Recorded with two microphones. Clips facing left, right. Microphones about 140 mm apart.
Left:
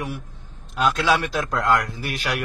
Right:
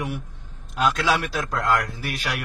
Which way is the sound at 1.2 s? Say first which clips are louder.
Left 2 dB; 10° right (ahead or behind).